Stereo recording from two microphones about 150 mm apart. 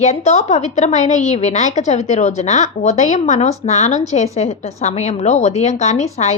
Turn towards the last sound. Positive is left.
turn(degrees=50)  # may be behind; listen again after turning